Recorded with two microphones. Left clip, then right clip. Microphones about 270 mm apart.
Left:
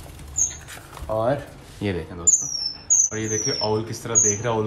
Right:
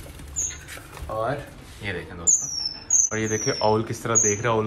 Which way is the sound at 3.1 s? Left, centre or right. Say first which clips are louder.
Even; centre.